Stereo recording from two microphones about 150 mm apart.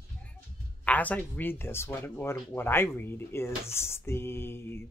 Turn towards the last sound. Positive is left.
turn(degrees=15)  # may be behind; listen again after turning